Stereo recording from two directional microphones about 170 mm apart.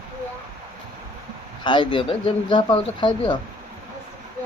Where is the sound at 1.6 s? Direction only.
30° left (ahead or behind).